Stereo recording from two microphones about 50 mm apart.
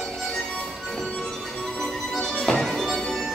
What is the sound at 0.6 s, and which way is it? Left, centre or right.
Music, centre.